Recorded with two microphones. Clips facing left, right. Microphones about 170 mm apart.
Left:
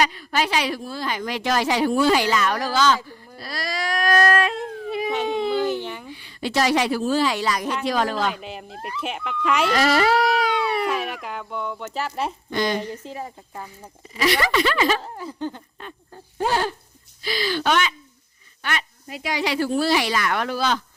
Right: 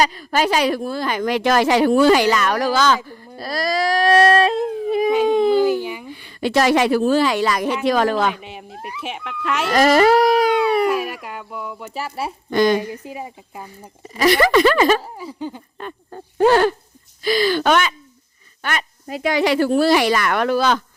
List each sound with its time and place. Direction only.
0.0 s speech: 40° right (ahead or behind)
3.3 s a sound: 40° right (ahead or behind)
5.5 s a sound: 10° right (ahead or behind)
6.1 s speech: 55° right (ahead or behind)
8.4 s speech: 5° right (ahead or behind)
9.7 s dog: 45° right (ahead or behind)
10.8 s speech: 5° right (ahead or behind)
12.5 s speech: 50° right (ahead or behind)
12.9 s speech: 10° right (ahead or behind)
14.1 s speech: 45° right (ahead or behind)
15.0 s speech: 10° right (ahead or behind)
15.8 s dog: 65° right (ahead or behind)
17.2 s speech: 50° right (ahead or behind)